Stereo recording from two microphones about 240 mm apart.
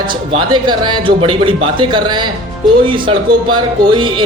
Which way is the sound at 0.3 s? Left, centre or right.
Centre.